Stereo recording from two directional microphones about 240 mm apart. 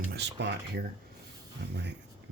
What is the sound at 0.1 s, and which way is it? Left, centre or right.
Speech, right.